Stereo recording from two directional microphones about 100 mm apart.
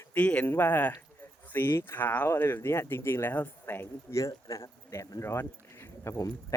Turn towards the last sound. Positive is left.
turn(degrees=25)  # may be behind; listen again after turning